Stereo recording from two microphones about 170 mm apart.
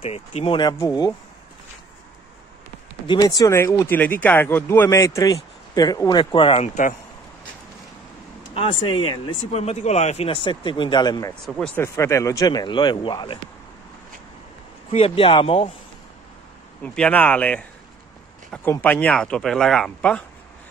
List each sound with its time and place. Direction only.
0.0 s speech: 35° left (ahead or behind)
3.1 s speech: 20° left (ahead or behind)
8.5 s speech: 30° left (ahead or behind)
11.4 s speech: centre (ahead or behind)
11.7 s speech: 15° left (ahead or behind)
14.9 s speech: 35° left (ahead or behind)
16.8 s speech: 5° left (ahead or behind)